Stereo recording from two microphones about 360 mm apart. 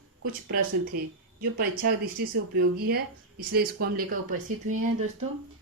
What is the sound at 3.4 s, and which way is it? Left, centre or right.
Speech, right.